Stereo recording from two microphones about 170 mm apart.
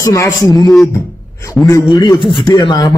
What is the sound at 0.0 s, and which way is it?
Speech, 20° left (ahead or behind).